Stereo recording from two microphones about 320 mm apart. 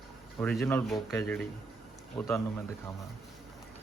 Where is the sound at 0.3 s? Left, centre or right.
Centre.